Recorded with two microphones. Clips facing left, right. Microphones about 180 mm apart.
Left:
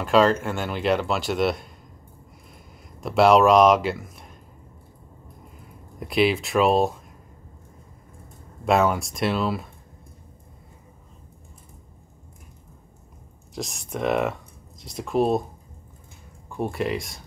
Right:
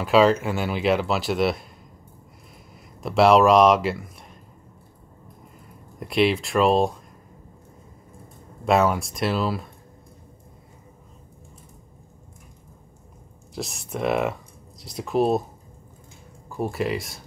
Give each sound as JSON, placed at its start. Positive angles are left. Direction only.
{"t": 0.0, "sound": "speech", "side_deg": -5}
{"t": 3.0, "sound": "a man's voice", "side_deg": 0}
{"t": 5.9, "sound": "speech", "side_deg": 0}
{"t": 8.6, "sound": "speech", "side_deg": 0}
{"t": 13.6, "sound": "speech", "side_deg": 0}
{"t": 16.4, "sound": "speech", "side_deg": 0}